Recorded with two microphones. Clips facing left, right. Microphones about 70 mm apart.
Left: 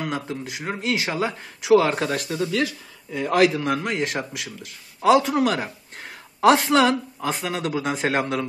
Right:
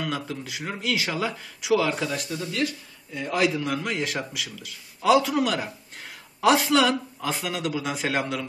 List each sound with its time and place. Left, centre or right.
0.0 s speech: left
1.7 s speech: left
2.1 s a man's voice: left
3.5 s a man's voice: left